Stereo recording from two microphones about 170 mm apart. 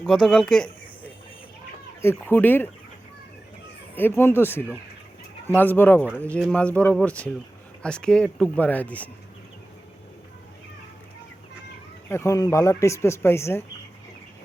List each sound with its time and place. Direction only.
0.0 s speech: 5° left (ahead or behind)
3.9 s speech: 10° left (ahead or behind)
12.0 s speech: 15° left (ahead or behind)